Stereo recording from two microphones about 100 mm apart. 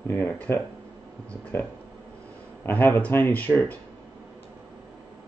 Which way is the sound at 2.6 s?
20° left (ahead or behind).